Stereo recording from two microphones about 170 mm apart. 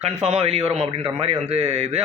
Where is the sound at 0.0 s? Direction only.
40° right (ahead or behind).